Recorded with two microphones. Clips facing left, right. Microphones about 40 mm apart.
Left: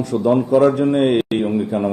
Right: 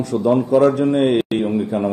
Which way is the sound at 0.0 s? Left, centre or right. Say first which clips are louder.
Even; centre.